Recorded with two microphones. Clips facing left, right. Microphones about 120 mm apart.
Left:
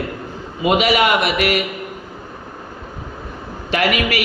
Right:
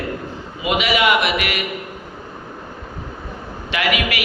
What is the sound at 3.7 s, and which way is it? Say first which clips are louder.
Speech: left 3 dB; 40° left (ahead or behind).